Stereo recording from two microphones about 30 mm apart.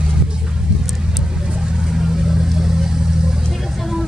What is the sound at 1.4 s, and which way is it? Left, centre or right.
Vehicle, right.